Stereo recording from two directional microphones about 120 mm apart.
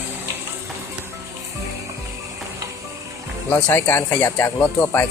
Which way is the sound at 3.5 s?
20° left (ahead or behind).